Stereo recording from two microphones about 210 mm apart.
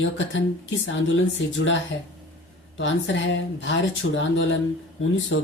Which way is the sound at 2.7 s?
65° left (ahead or behind).